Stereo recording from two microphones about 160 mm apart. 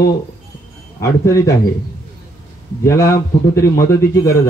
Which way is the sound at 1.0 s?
20° left (ahead or behind).